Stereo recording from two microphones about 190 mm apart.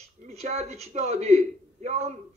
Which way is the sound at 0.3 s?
35° right (ahead or behind).